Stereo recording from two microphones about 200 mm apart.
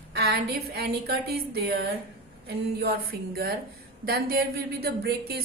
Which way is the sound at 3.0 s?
50° right (ahead or behind).